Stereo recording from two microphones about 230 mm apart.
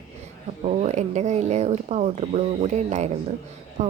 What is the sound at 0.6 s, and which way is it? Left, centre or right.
Speech, right.